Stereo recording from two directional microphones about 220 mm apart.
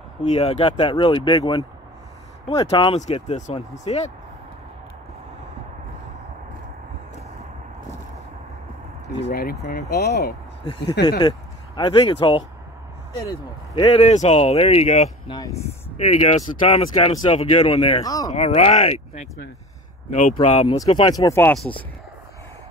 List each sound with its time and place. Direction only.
0.2 s speech: 30° left (ahead or behind)
9.3 s speech: 45° left (ahead or behind)
10.6 s speech: 20° left (ahead or behind)
18.3 s speech: 30° left (ahead or behind)
20.7 s speech: 15° left (ahead or behind)